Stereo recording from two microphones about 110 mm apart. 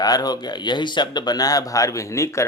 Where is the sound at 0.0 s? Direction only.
35° left (ahead or behind).